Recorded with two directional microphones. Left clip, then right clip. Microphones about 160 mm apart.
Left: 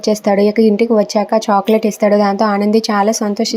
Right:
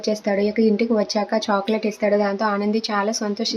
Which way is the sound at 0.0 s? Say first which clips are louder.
Left 8 dB; 40° left (ahead or behind).